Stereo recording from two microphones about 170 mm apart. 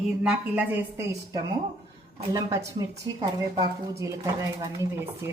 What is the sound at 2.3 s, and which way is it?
Speech, 20° right (ahead or behind).